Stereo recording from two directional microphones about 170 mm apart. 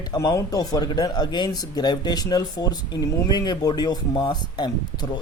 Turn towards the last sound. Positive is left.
turn(degrees=25)  # may be behind; listen again after turning